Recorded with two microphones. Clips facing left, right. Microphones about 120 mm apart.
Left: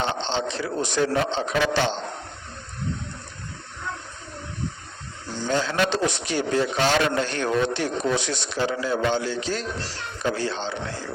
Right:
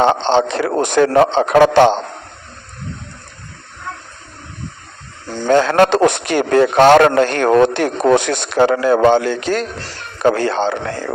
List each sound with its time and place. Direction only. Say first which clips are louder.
0.0 s a man's voice: right 12 dB; 60° right (ahead or behind)
3.9 s water: right 4 dB; 60° right (ahead or behind)
5.3 s a man's voice: right 11 dB; 60° right (ahead or behind)